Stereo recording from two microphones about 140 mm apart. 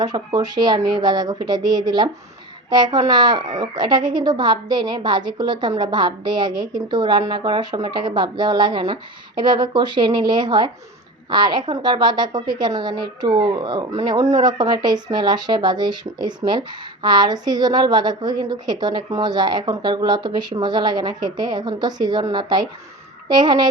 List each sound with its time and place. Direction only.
0.0 s speech: 30° right (ahead or behind)